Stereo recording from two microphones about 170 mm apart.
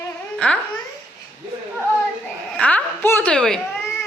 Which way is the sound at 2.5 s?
5° left (ahead or behind).